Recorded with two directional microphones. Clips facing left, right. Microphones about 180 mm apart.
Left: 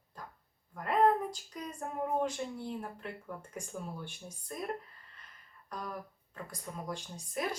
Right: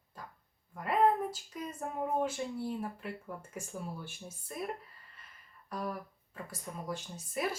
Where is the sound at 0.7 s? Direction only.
5° right (ahead or behind).